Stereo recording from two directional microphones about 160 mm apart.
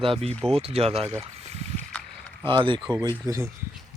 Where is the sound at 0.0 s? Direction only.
35° right (ahead or behind).